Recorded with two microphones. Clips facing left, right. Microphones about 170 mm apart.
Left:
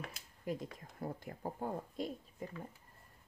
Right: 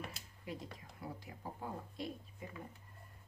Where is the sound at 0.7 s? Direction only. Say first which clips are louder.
Left 5 dB; 50° left (ahead or behind).